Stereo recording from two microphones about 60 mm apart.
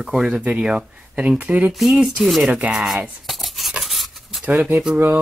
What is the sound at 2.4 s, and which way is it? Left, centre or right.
Speech, centre.